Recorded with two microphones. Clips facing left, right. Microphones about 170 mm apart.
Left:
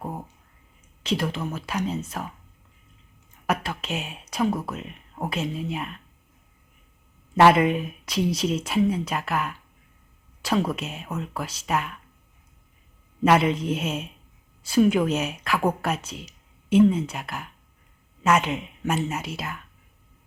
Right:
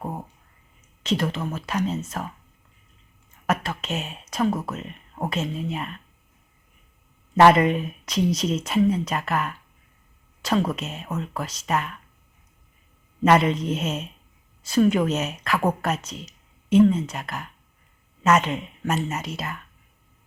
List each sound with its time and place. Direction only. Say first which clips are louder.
1.0 s speech: right 1 dB; 5° left (ahead or behind)
3.4 s speech: right 1 dB; 10° left (ahead or behind)
7.3 s speech: right 1 dB; 5° left (ahead or behind)
13.2 s speech: right 1 dB; 5° left (ahead or behind)
16.6 s speech: right 1 dB; 10° left (ahead or behind)